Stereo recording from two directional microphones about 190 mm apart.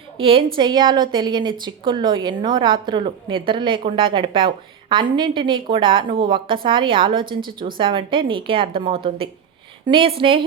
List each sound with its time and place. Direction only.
0.2 s a woman's voice: 25° right (ahead or behind)